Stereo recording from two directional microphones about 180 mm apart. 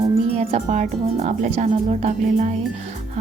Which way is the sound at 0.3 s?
40° right (ahead or behind).